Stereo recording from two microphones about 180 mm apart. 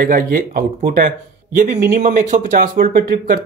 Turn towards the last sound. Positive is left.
turn(degrees=-50)  # may be behind; listen again after turning